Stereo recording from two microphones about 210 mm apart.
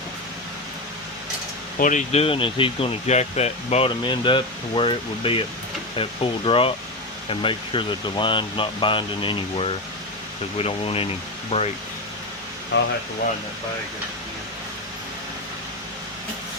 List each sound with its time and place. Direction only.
1.8 s speech: 35° left (ahead or behind)
12.7 s speech: 55° left (ahead or behind)